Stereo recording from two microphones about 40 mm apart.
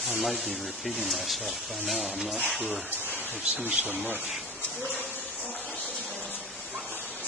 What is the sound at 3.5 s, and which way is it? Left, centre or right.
Speech, right.